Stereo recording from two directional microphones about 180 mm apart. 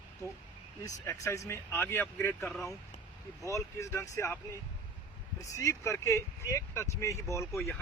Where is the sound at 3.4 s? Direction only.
15° left (ahead or behind).